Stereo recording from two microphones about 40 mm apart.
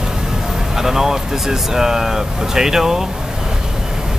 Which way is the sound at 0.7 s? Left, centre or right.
Centre.